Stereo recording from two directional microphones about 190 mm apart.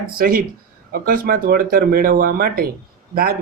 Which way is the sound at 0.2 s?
50° right (ahead or behind).